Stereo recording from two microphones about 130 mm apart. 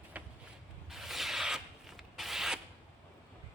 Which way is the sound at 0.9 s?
Centre (ahead or behind).